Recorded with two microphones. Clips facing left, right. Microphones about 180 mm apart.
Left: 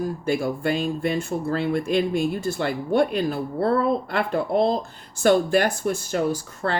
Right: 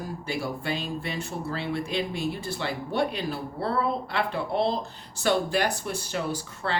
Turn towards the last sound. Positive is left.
turn(degrees=45)  # may be behind; listen again after turning